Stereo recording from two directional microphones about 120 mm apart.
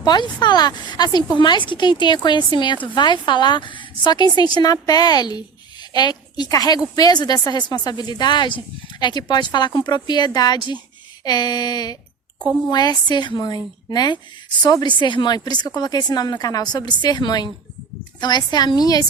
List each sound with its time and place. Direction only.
0.0 s a woman's voice: 35° left (ahead or behind)